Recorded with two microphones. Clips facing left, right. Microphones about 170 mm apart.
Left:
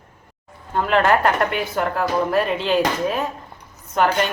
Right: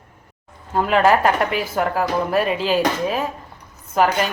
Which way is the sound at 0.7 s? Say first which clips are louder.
Right 2 dB; 5° right (ahead or behind).